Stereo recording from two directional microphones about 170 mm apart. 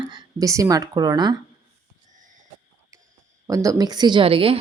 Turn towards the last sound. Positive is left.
turn(degrees=-35)  # may be behind; listen again after turning